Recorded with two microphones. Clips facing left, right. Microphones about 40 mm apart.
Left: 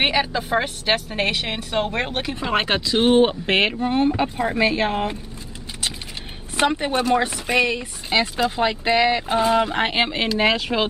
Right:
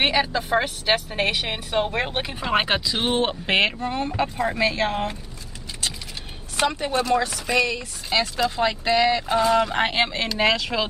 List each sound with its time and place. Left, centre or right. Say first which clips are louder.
0.0 s a woman's voice: left 1 dB; centre
3.8 s speech: left 5 dB; centre
6.5 s speech: left 3 dB; left